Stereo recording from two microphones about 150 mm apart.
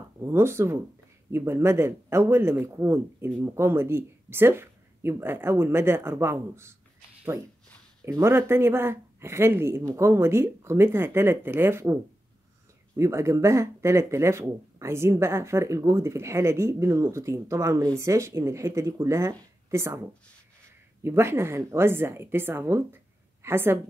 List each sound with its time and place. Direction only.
0.2 s speech: 15° right (ahead or behind)
8.0 s speech: 15° right (ahead or behind)